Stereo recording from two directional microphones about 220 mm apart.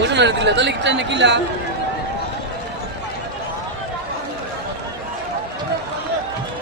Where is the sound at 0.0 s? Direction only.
50° right (ahead or behind).